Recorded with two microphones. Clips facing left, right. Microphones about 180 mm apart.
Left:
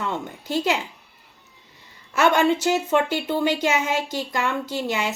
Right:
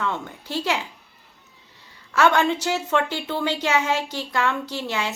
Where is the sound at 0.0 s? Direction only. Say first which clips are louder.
Even; 15° left (ahead or behind).